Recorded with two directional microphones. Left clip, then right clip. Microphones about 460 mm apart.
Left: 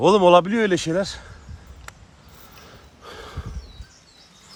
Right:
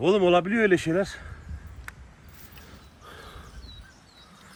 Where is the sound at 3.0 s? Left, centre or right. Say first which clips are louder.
Left 7 dB; centre.